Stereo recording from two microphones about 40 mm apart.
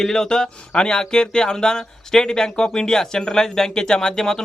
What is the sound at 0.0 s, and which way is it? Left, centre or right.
Speech, centre.